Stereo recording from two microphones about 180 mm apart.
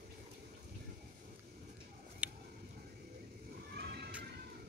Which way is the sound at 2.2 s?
10° right (ahead or behind).